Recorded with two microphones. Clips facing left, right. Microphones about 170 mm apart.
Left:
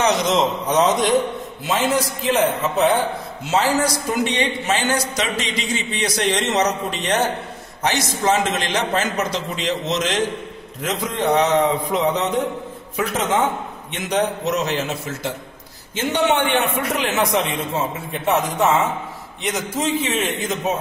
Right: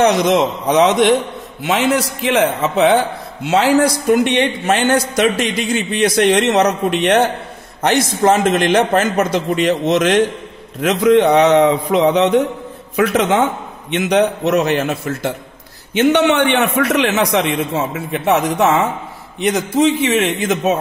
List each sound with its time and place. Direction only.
0.0 s a man's voice: 65° right (ahead or behind)
7.8 s a man's voice: 55° right (ahead or behind)
10.8 s a man's voice: 75° right (ahead or behind)